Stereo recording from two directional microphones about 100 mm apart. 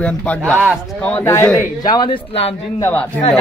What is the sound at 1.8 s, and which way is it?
Speech, 50° left (ahead or behind).